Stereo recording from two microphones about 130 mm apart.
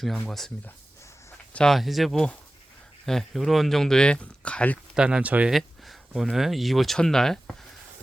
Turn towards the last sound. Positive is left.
turn(degrees=5)  # may be behind; listen again after turning